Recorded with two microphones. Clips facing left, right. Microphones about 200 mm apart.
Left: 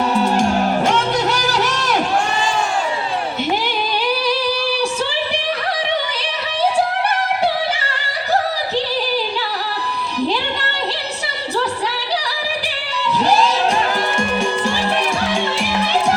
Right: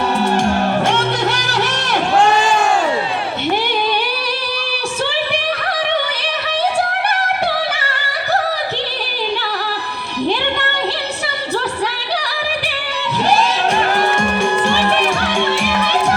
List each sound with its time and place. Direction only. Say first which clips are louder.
1.8 s crowd: right 4 dB; 90° right
13.9 s music: right 3 dB; 60° right (ahead or behind)